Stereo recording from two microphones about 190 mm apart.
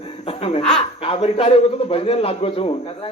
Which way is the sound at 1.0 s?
30° left (ahead or behind).